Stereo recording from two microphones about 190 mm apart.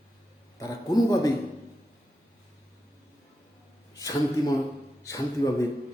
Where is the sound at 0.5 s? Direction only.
20° left (ahead or behind).